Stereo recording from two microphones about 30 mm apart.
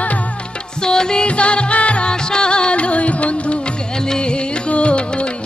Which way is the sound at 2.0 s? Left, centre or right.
Left.